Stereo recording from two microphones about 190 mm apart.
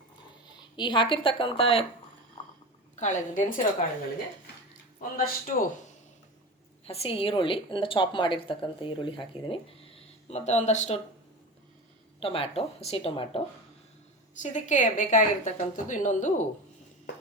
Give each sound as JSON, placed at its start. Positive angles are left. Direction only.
{"t": 0.8, "sound": "a woman's voice", "side_deg": 25}
{"t": 2.9, "sound": "a woman's voice", "side_deg": 40}
{"t": 4.9, "sound": "speech", "side_deg": 50}
{"t": 6.8, "sound": "a woman's voice", "side_deg": 30}
{"t": 12.2, "sound": "a woman's voice", "side_deg": 30}
{"t": 14.3, "sound": "a woman's voice", "side_deg": 40}